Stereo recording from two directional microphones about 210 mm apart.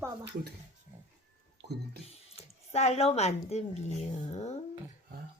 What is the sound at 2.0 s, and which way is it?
Speech, 30° left (ahead or behind).